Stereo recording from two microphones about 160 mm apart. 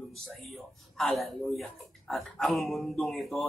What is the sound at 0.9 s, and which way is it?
Speech, centre (ahead or behind).